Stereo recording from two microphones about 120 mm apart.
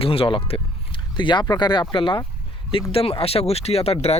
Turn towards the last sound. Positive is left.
turn(degrees=60)  # may be behind; listen again after turning